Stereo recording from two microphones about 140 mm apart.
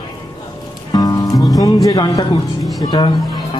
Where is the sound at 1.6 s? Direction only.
25° left (ahead or behind).